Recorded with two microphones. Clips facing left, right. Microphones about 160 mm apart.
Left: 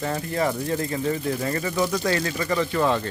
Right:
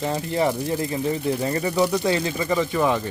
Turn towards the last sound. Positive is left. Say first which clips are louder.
# right 1 dB
turn(degrees=-15)  # may be behind; listen again after turning